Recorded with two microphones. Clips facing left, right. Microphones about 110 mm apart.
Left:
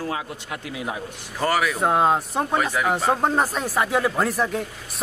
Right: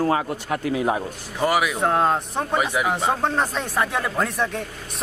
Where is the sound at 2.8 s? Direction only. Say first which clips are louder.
Left 1 dB; centre (ahead or behind).